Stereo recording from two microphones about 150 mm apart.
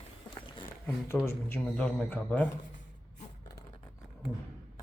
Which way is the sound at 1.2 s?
15° left (ahead or behind).